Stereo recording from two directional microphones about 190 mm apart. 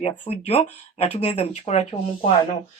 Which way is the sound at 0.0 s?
30° left (ahead or behind).